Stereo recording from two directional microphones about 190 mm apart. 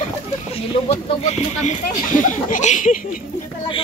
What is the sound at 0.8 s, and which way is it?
Speech, 35° left (ahead or behind).